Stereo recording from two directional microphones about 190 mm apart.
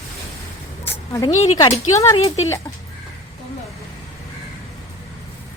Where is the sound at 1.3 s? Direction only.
40° left (ahead or behind).